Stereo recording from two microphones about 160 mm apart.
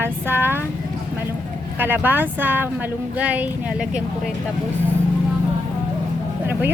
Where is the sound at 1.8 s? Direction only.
10° right (ahead or behind).